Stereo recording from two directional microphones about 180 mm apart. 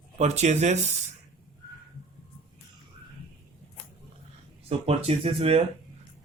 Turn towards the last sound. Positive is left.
turn(degrees=-35)  # may be behind; listen again after turning